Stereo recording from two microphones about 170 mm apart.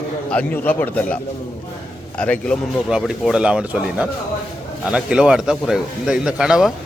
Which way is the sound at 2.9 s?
5° right (ahead or behind).